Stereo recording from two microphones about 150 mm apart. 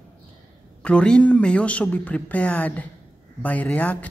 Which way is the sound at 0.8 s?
5° left (ahead or behind).